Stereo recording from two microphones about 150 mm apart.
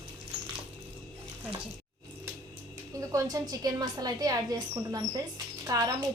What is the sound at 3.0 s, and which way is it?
A woman's voice, 20° right (ahead or behind).